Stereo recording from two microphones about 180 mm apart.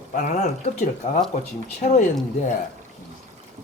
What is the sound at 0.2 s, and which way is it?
Speech, 40° left (ahead or behind).